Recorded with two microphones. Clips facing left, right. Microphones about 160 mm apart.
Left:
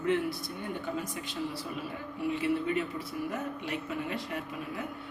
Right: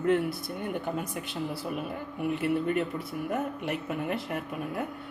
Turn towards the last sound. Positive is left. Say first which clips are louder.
# right 4 dB
turn(degrees=-55)  # may be behind; listen again after turning